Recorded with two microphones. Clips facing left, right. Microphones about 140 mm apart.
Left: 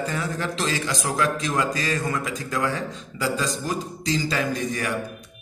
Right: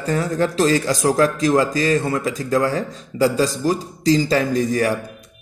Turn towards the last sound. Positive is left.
turn(degrees=-35)  # may be behind; listen again after turning